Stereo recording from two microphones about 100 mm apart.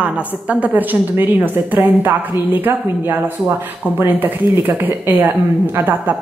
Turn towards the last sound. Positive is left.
turn(degrees=-20)  # may be behind; listen again after turning